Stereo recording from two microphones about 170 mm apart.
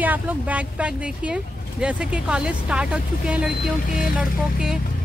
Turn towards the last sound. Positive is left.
turn(degrees=-5)  # may be behind; listen again after turning